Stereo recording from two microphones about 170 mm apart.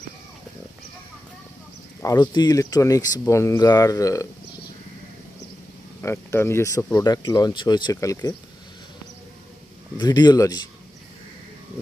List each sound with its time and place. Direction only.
2.0 s speech: 20° left (ahead or behind)
6.0 s speech: 15° left (ahead or behind)
10.0 s speech: 25° left (ahead or behind)